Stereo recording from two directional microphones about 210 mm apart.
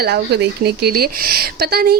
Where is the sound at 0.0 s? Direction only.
50° right (ahead or behind).